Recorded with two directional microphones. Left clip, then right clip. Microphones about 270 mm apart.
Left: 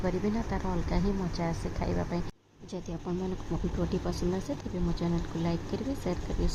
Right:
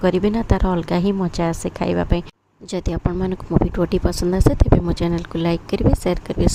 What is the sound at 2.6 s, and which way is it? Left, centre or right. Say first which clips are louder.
A woman's voice: right 13 dB; right.